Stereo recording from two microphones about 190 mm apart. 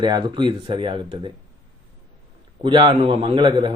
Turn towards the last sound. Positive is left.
turn(degrees=-25)  # may be behind; listen again after turning